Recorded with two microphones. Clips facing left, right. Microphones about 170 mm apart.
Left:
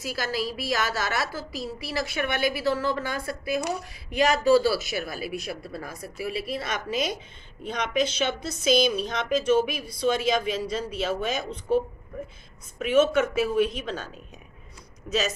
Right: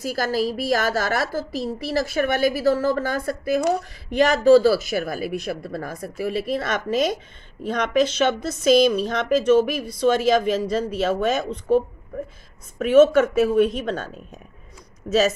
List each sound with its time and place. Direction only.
0.0 s speech: 45° right (ahead or behind)
11.1 s speech: 55° right (ahead or behind)
12.7 s speech: 45° right (ahead or behind)
15.0 s speech: 50° right (ahead or behind)